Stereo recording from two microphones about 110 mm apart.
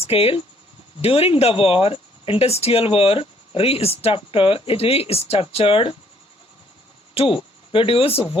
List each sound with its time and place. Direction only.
0.0 s speech: 65° left (ahead or behind)
7.1 s speech: 55° left (ahead or behind)